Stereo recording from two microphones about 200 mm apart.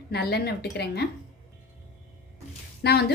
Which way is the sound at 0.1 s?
55° left (ahead or behind).